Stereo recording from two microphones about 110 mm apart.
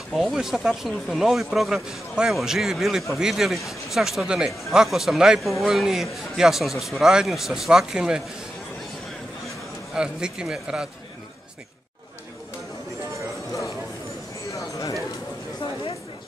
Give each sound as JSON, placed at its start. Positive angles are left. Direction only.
{"t": 0.1, "sound": "speech", "side_deg": 0}
{"t": 9.9, "sound": "speech", "side_deg": -10}
{"t": 14.5, "sound": "a sound", "side_deg": 30}